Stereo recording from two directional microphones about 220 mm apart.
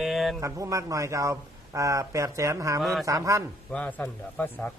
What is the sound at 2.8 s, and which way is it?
Speech, centre (ahead or behind).